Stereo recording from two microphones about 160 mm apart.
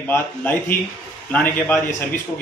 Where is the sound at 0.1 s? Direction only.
10° left (ahead or behind).